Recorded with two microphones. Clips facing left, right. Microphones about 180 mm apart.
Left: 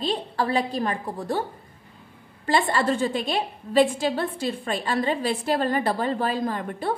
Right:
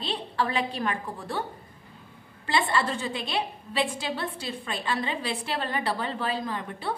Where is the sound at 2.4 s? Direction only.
45° left (ahead or behind).